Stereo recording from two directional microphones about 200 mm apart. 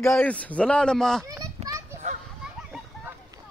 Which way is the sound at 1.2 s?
15° right (ahead or behind).